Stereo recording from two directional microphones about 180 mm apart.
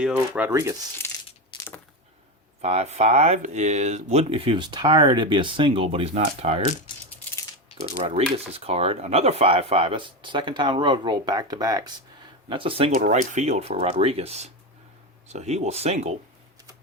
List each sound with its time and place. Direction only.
0.2 s speech: 10° right (ahead or behind)
2.6 s speech: 35° right (ahead or behind)
8.0 s speech: 35° right (ahead or behind)
13.0 s speech: 40° right (ahead or behind)